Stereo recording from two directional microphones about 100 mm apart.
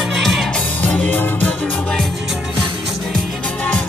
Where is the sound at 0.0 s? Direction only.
Centre (ahead or behind).